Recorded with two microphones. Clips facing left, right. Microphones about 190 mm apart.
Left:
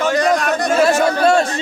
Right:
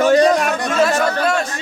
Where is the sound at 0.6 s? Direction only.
40° left (ahead or behind).